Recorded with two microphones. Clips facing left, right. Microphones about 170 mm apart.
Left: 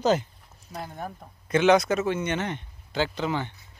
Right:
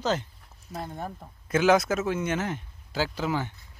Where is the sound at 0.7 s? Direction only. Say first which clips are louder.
Right 1 dB; centre (ahead or behind).